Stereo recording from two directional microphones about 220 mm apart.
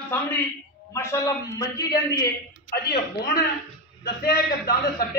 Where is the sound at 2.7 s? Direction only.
45° left (ahead or behind).